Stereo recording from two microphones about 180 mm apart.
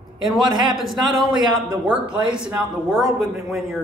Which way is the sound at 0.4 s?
25° right (ahead or behind).